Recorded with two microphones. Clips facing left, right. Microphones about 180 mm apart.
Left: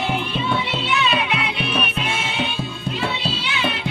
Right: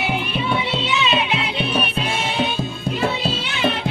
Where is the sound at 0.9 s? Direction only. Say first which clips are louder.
Even; 20° right (ahead or behind).